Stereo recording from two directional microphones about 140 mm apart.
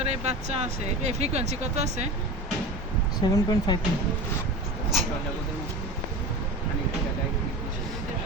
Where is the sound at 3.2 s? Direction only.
30° left (ahead or behind).